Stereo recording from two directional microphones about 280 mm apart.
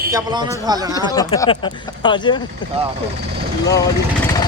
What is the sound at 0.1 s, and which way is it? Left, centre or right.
Speech, centre.